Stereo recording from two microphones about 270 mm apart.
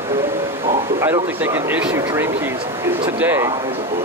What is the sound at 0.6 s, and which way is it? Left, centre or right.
Speech, centre.